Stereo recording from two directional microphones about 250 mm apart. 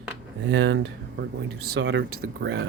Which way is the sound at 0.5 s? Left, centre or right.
Right.